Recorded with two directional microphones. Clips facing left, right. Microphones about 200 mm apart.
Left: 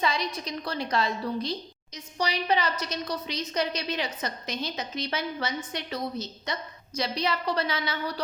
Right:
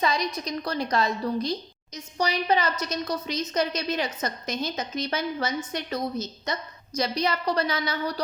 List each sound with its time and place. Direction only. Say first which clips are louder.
0.0 s a woman's voice: right 2 dB; 45° right (ahead or behind)